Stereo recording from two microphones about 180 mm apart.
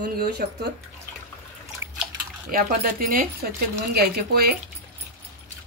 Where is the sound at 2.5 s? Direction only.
55° right (ahead or behind).